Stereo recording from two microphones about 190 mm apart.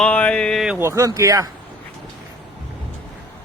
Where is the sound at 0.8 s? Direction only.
15° right (ahead or behind).